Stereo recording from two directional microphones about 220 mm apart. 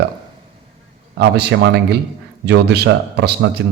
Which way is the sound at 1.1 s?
50° right (ahead or behind).